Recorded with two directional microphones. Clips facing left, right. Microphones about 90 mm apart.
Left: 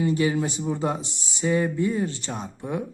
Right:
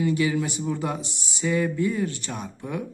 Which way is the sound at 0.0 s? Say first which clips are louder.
Left 1 dB; 30° left (ahead or behind).